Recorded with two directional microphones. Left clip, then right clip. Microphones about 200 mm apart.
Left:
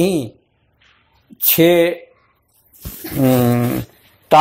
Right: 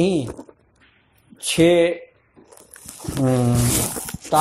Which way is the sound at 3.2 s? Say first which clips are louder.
Left 6 dB; 30° left (ahead or behind).